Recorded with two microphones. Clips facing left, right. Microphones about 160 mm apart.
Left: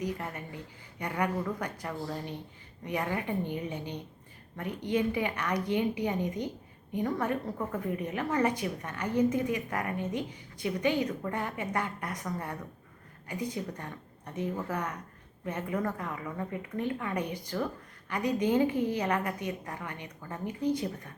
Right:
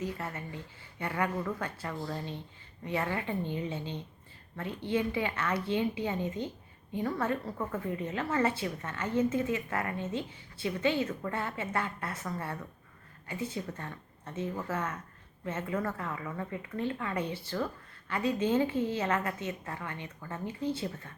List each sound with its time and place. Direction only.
0.0 s a woman's voice: 15° left (ahead or behind)